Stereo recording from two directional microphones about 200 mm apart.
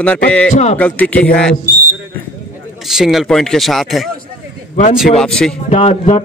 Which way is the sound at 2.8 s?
Centre (ahead or behind).